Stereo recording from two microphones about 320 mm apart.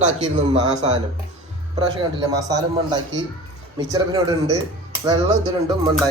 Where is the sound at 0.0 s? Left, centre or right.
Centre.